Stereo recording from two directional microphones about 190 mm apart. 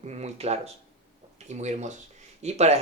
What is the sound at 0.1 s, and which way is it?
Speech, 35° right (ahead or behind).